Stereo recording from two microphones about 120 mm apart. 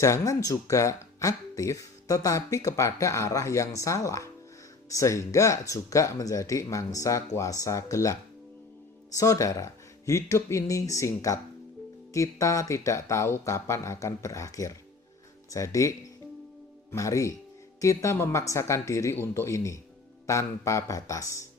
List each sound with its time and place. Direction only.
0.0 s speech: 25° left (ahead or behind)